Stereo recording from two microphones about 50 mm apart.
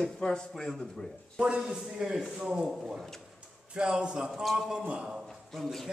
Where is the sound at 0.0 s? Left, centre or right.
Centre.